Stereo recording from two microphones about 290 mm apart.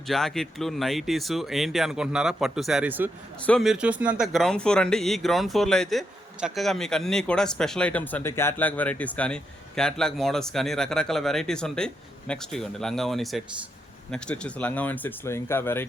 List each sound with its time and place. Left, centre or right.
0.1 s speech: centre